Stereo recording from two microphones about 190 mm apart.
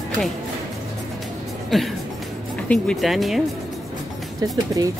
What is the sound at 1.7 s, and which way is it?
Speech, centre (ahead or behind).